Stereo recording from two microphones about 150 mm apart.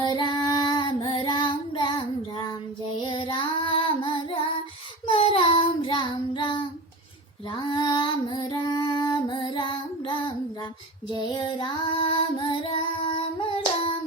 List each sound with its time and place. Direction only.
0.0 s child singing: 30° left (ahead or behind)
7.5 s female singing: 30° left (ahead or behind)
11.2 s child singing: 30° left (ahead or behind)